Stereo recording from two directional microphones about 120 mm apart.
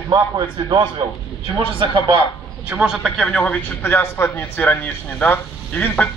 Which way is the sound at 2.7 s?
10° right (ahead or behind).